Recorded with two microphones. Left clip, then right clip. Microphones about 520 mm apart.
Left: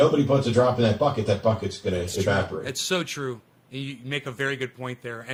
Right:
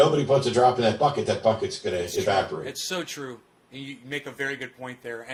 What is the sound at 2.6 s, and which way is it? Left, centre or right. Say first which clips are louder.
A man's voice: left 4 dB; left.